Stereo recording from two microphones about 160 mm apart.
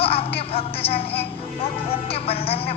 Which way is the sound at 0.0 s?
35° left (ahead or behind).